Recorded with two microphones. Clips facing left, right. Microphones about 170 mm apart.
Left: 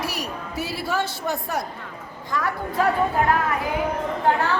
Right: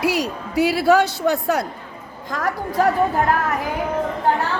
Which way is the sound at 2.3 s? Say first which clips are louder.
Right 3 dB; 40° right (ahead or behind).